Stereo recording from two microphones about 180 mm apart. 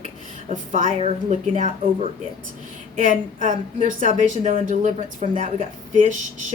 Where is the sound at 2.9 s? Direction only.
45° right (ahead or behind).